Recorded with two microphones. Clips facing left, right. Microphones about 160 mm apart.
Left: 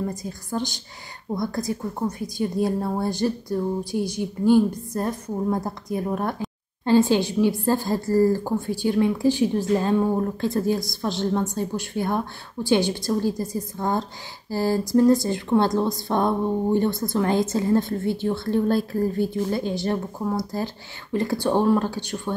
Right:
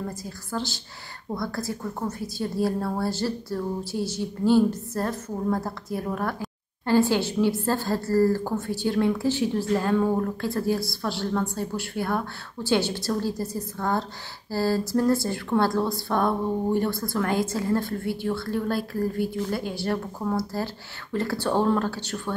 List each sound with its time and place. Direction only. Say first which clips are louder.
0.1 s a woman's voice: left 3 dB; 20° left (ahead or behind)